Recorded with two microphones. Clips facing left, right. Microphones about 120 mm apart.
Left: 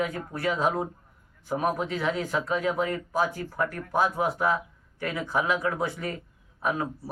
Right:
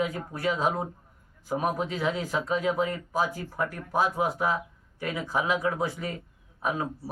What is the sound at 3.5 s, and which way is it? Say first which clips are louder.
Speech: left 2 dB; 15° right (ahead or behind).